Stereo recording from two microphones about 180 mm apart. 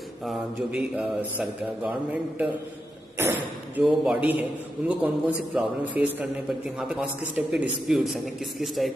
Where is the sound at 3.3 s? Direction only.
5° right (ahead or behind).